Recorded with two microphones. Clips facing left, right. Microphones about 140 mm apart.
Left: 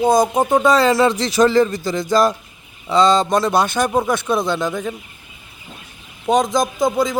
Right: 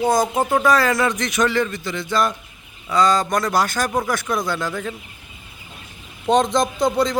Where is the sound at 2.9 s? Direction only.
25° left (ahead or behind).